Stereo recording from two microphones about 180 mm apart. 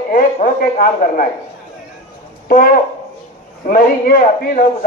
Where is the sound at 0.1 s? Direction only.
50° left (ahead or behind).